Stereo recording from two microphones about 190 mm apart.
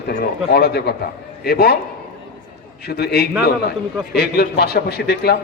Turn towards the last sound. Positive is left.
turn(degrees=55)  # may be behind; listen again after turning